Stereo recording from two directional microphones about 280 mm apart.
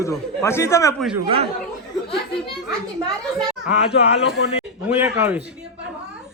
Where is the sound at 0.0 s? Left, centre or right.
Centre.